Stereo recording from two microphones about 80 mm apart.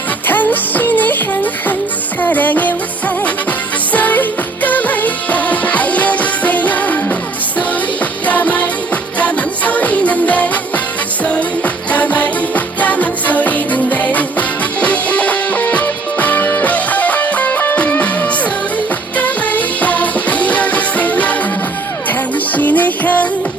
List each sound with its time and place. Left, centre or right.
0.3 s music: left
3.9 s music: left
8.3 s music: centre
22.5 s music: left